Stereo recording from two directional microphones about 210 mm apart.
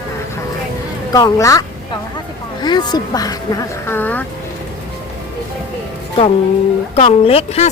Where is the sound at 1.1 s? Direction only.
15° left (ahead or behind).